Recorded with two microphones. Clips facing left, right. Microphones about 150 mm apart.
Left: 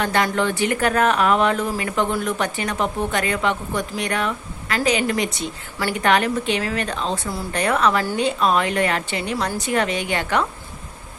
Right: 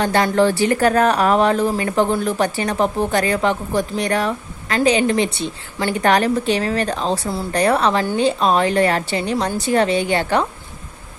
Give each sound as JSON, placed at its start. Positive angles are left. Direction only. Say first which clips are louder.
{"t": 0.0, "sound": "speech", "louder": "right 5 dB", "side_deg": -30}